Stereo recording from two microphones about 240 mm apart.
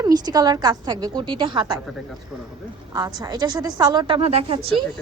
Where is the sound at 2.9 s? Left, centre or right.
Centre.